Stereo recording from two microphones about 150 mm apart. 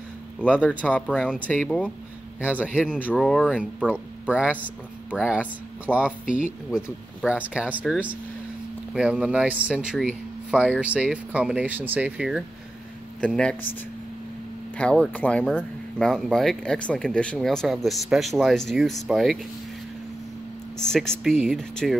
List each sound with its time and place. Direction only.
0.4 s speech: 10° left (ahead or behind)
3.1 s speech: 5° left (ahead or behind)
3.8 s speech: 10° right (ahead or behind)
13.2 s speech: 5° left (ahead or behind)
14.8 s speech: 5° left (ahead or behind)
20.7 s speech: 5° left (ahead or behind)